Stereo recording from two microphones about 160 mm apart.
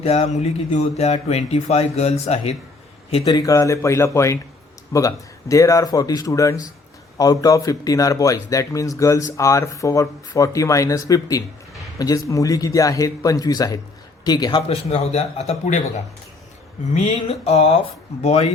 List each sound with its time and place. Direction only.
0.0 s speech: 40° left (ahead or behind)
3.2 s speech: 20° left (ahead or behind); by 15.8 s 45° left (ahead or behind)
16.9 s speech: 40° left (ahead or behind)